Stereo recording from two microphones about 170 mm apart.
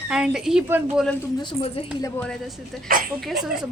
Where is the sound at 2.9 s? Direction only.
60° right (ahead or behind).